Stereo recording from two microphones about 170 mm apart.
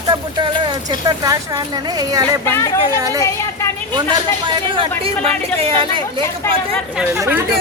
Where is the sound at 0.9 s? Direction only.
20° right (ahead or behind).